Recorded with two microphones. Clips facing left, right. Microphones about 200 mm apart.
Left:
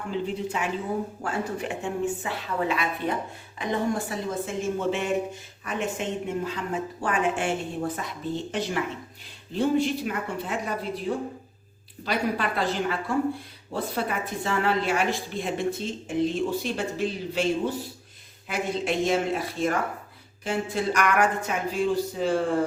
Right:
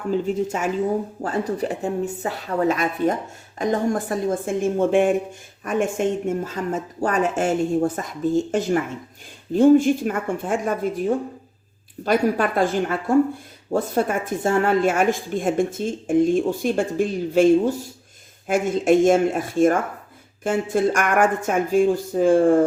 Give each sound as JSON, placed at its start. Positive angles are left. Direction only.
{"t": 0.1, "sound": "a woman's voice", "side_deg": -45}
{"t": 12.0, "sound": "a woman's voice", "side_deg": -45}